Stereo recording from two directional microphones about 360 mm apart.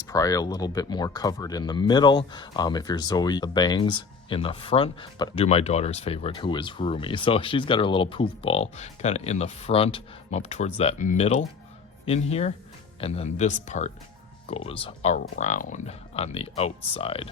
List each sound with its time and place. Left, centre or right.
0.1 s speech: centre